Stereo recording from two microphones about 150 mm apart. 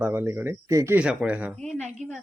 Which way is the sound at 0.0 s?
15° right (ahead or behind).